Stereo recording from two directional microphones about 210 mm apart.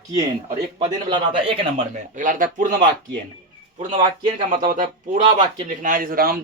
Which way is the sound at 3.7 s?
25° right (ahead or behind).